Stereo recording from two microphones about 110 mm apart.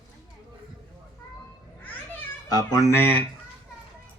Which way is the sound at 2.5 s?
35° left (ahead or behind).